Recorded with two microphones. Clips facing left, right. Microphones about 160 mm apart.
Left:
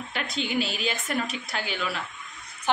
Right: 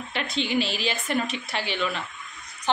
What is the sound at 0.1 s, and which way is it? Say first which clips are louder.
A woman's voice: right 3 dB; centre (ahead or behind).